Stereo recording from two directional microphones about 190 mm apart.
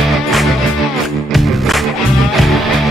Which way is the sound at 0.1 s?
Centre (ahead or behind).